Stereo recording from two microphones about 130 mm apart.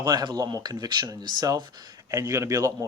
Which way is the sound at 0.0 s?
30° right (ahead or behind).